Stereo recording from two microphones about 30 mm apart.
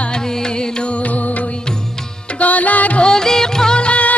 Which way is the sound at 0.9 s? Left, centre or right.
Left.